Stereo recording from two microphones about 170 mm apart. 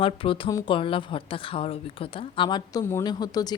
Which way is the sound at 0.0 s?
30° left (ahead or behind).